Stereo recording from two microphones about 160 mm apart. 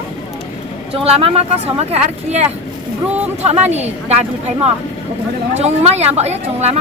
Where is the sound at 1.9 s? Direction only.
40° right (ahead or behind).